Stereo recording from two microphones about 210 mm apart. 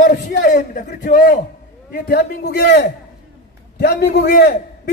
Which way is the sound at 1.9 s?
50° left (ahead or behind).